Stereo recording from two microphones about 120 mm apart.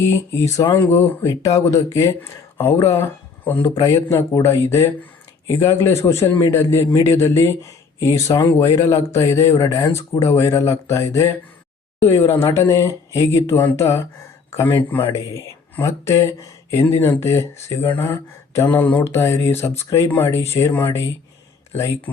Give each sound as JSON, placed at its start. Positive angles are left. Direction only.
{"t": 0.0, "sound": "speech", "side_deg": 20}